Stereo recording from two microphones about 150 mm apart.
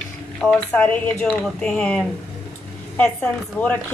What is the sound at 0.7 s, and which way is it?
A woman's voice, 10° left (ahead or behind).